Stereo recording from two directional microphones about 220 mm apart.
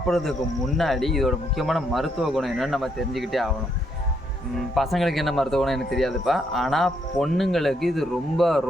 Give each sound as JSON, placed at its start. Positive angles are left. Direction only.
{"t": 0.1, "sound": "speech", "side_deg": 0}
{"t": 4.7, "sound": "speech", "side_deg": 0}